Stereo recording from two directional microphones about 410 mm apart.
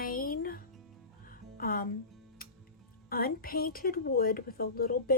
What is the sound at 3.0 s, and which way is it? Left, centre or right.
A woman's voice, left.